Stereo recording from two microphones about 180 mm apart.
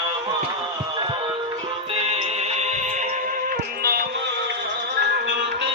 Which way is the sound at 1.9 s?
35° right (ahead or behind).